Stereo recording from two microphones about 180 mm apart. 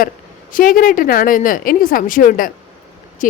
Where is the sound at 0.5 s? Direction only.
50° left (ahead or behind).